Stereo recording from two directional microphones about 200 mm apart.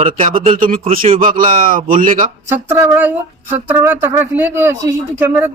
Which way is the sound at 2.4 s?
10° right (ahead or behind).